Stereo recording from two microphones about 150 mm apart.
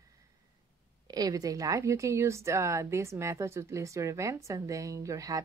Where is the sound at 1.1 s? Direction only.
25° right (ahead or behind).